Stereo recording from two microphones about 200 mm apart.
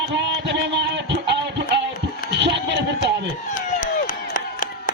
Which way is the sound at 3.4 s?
40° left (ahead or behind).